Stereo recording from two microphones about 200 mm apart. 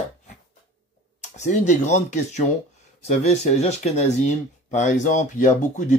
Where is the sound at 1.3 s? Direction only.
35° left (ahead or behind).